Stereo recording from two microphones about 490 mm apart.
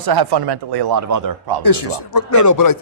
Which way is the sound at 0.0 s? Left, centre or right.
Right.